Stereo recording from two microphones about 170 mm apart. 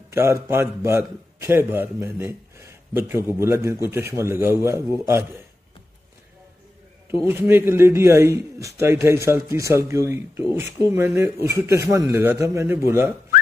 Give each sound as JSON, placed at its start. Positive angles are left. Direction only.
{"t": 0.1, "sound": "a man's voice", "side_deg": -15}
{"t": 7.2, "sound": "a man's voice", "side_deg": -15}